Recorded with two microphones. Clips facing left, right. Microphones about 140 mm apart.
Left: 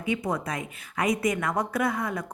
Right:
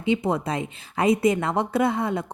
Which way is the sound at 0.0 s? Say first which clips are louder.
Right 5 dB; 25° right (ahead or behind).